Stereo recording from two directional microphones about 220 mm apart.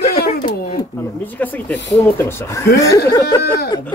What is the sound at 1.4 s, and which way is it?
Speech, 10° left (ahead or behind).